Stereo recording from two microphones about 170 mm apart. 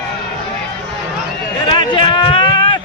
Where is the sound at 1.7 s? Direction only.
30° left (ahead or behind).